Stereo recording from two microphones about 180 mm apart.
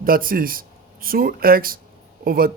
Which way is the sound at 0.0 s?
55° right (ahead or behind).